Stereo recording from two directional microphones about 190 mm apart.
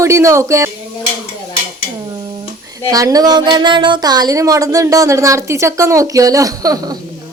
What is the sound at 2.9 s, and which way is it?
Speech, 20° right (ahead or behind).